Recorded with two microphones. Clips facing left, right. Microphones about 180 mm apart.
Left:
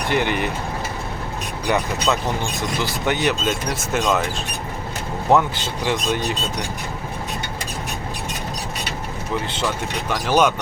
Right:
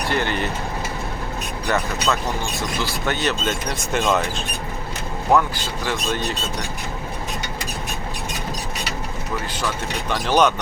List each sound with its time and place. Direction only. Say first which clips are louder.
0.1 s speech: left 3 dB; 15° left (ahead or behind)
1.6 s speech: left 2 dB; 15° left (ahead or behind)
3.9 s speech: even; centre (ahead or behind)
5.3 s speech: left 1 dB; 20° left (ahead or behind)
10.1 s speech: even; 10° left (ahead or behind)